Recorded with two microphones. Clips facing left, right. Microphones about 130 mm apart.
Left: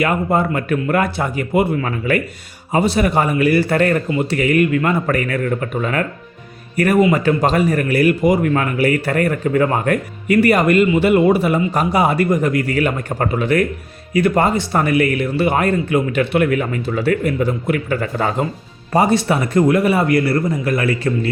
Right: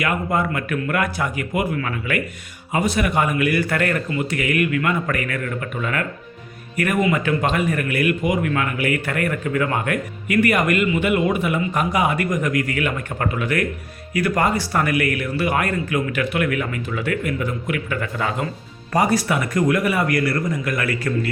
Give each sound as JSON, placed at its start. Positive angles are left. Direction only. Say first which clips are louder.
{"t": 0.0, "sound": "speech", "louder": "left 5 dB", "side_deg": 30}